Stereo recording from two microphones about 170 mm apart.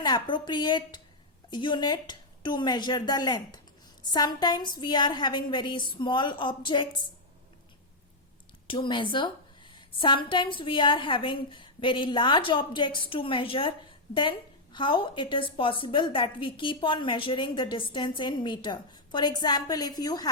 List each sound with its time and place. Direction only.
0.0 s a woman's voice: 25° left (ahead or behind)
8.6 s a woman's voice: 30° left (ahead or behind)